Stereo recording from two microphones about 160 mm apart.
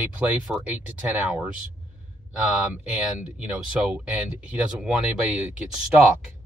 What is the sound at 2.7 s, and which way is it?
Speech, 10° right (ahead or behind).